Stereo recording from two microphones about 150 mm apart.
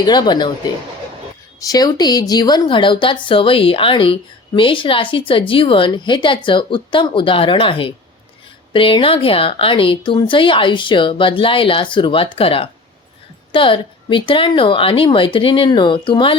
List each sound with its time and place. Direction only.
0.0 s a woman's voice: 30° left (ahead or behind)
1.5 s a woman's voice: 25° left (ahead or behind)